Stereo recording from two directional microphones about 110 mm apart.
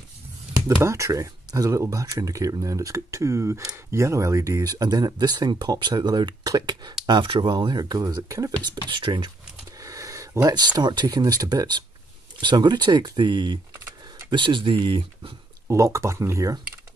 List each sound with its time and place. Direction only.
0.8 s speech: 30° right (ahead or behind)
8.9 s speech: 45° right (ahead or behind)
9.8 s speech: 30° right (ahead or behind)
14.4 s speech: 50° right (ahead or behind)
15.7 s speech: 25° right (ahead or behind)